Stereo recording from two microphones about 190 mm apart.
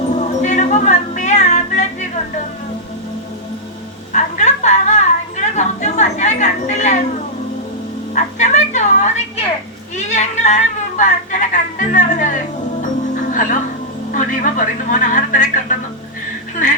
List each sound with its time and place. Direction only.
0.2 s music: 40° left (ahead or behind)
4.1 s a sound: 40° left (ahead or behind)
8.1 s music: 40° left (ahead or behind)
14.1 s a man's voice: 45° left (ahead or behind)